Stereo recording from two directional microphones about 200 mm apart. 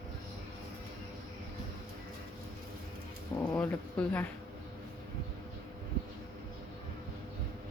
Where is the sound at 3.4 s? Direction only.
5° left (ahead or behind).